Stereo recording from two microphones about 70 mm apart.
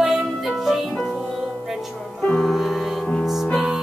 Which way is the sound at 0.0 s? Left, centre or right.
Centre.